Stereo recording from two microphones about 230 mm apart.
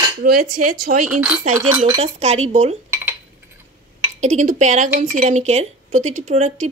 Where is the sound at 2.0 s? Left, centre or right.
Right.